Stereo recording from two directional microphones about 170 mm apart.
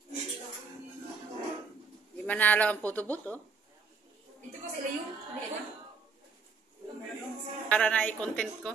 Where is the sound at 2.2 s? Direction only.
10° left (ahead or behind).